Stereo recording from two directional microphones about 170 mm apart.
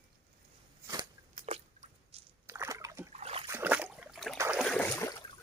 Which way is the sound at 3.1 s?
40° right (ahead or behind).